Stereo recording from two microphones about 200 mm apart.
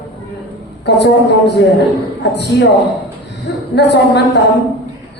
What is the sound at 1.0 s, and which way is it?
A man's voice, 55° left (ahead or behind).